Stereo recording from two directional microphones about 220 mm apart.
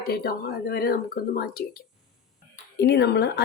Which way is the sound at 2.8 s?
50° left (ahead or behind).